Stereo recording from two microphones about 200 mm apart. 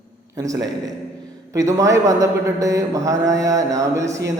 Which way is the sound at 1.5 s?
15° right (ahead or behind).